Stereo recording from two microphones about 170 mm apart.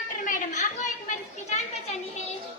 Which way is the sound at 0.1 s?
50° left (ahead or behind).